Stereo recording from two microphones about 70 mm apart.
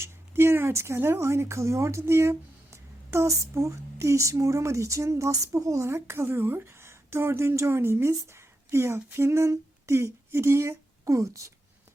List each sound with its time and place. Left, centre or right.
0.0 s speech: right